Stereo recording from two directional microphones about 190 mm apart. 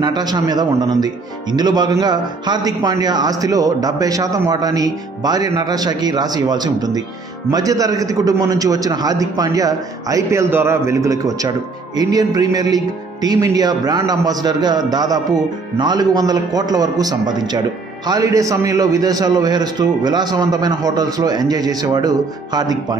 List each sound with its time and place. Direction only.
0.0 s a man's voice: 20° right (ahead or behind)